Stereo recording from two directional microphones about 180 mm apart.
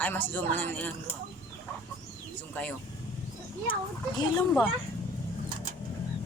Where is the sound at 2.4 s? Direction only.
10° left (ahead or behind).